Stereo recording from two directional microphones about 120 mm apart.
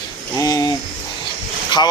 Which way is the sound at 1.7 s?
40° left (ahead or behind).